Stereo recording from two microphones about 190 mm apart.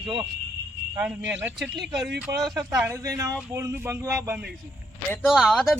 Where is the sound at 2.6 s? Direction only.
15° right (ahead or behind).